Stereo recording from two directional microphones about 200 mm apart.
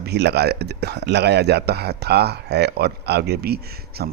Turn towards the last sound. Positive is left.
turn(degrees=-50)  # may be behind; listen again after turning